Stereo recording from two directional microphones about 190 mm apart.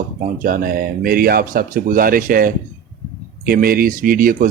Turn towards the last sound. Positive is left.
turn(degrees=-45)  # may be behind; listen again after turning